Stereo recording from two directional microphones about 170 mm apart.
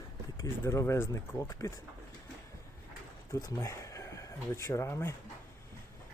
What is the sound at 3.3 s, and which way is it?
Speech, 20° left (ahead or behind).